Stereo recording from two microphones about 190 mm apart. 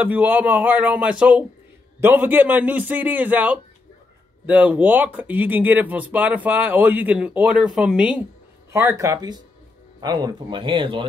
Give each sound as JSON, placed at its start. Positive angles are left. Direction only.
{"t": 0.0, "sound": "speech", "side_deg": -10}
{"t": 8.7, "sound": "speech", "side_deg": -15}